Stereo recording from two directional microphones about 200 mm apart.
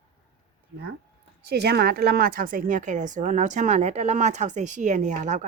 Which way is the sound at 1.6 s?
55° right (ahead or behind).